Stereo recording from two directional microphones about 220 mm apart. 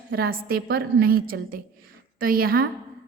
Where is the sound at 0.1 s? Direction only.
45° right (ahead or behind).